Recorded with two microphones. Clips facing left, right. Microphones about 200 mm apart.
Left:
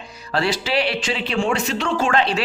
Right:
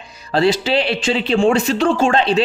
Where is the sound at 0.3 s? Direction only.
25° right (ahead or behind).